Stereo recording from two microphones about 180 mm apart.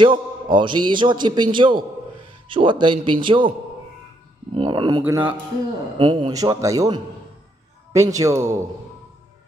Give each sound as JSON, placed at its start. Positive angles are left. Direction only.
{"t": 0.0, "sound": "a man's voice", "side_deg": -25}
{"t": 4.6, "sound": "a man's voice", "side_deg": -25}
{"t": 5.0, "sound": "a man's voice", "side_deg": -10}
{"t": 5.9, "sound": "a man's voice", "side_deg": -25}